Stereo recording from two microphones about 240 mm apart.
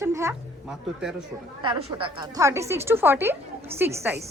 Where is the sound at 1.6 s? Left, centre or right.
Right.